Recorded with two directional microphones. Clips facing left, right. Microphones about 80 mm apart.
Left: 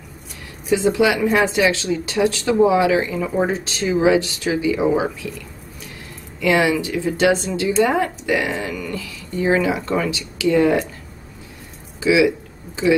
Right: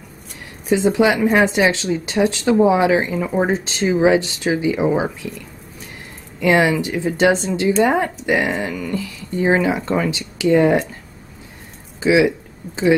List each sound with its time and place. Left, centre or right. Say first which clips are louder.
0.7 s speech: right 1 dB; right
6.4 s speech: right 2 dB; right
12.0 s speech: right 1 dB; right